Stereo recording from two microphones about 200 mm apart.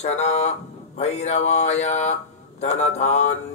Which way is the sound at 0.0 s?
35° left (ahead or behind).